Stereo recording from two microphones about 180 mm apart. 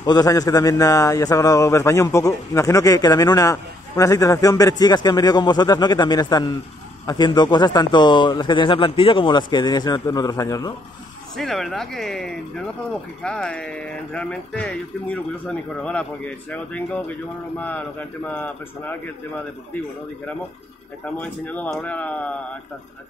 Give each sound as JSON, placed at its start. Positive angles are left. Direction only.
{"t": 0.0, "sound": "a man's voice", "side_deg": 20}
{"t": 11.3, "sound": "speech", "side_deg": 0}
{"t": 21.0, "sound": "speech", "side_deg": 10}